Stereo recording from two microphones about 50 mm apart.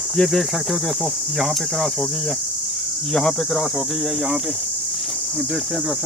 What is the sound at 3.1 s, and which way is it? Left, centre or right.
Speech, centre.